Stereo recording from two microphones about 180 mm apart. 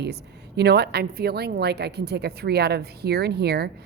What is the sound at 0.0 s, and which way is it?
A woman's voice, 65° right (ahead or behind).